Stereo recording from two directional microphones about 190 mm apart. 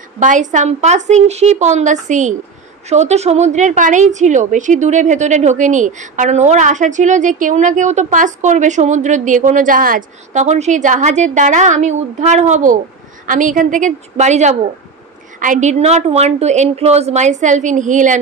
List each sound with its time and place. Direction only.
0.2 s a woman's voice: 40° right (ahead or behind)